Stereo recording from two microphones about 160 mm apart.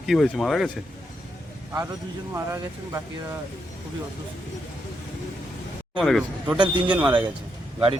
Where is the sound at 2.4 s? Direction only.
20° right (ahead or behind).